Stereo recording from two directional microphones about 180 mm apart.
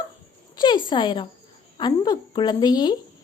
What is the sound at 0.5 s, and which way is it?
Speech, 25° left (ahead or behind).